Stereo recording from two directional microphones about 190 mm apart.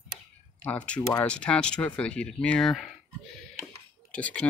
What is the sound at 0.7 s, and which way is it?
Speech, 5° left (ahead or behind).